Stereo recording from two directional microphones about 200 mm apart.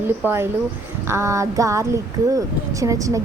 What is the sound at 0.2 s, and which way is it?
A woman's voice, 10° right (ahead or behind).